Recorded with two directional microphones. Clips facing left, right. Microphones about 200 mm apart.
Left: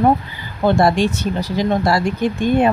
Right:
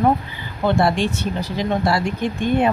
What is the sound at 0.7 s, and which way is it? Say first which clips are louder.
Speech: left 3 dB; 40° left (ahead or behind).